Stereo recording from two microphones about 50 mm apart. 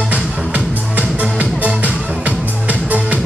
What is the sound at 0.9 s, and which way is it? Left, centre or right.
Music, right.